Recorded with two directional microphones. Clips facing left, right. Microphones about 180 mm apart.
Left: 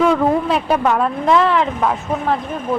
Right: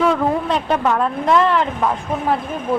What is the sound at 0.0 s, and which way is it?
Speech, 5° left (ahead or behind).